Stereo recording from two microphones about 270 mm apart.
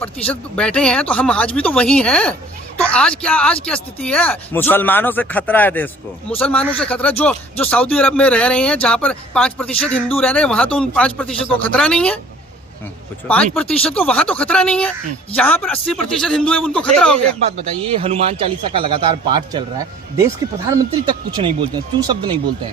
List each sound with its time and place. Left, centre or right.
0.0 s speech: centre
13.2 s speech: centre
17.9 s speech: right